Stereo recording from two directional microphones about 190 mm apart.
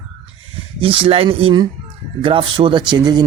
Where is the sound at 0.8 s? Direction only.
30° right (ahead or behind).